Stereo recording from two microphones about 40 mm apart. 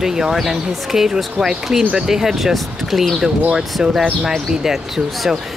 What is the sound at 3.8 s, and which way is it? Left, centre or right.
Speech, centre.